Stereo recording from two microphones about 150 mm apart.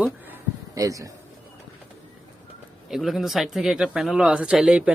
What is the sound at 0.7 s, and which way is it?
Speech, 20° right (ahead or behind).